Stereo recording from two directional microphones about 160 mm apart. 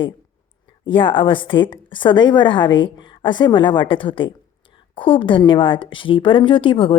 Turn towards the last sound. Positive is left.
turn(degrees=30)  # may be behind; listen again after turning